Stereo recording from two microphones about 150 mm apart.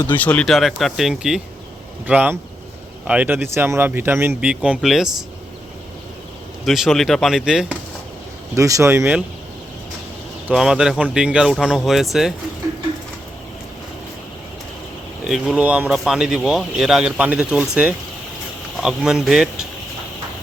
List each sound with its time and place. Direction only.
0.1 s speech: 10° left (ahead or behind)
6.7 s speech: centre (ahead or behind)
8.5 s speech: 20° right (ahead or behind)
10.5 s speech: 5° right (ahead or behind)
15.3 s speech: 5° right (ahead or behind)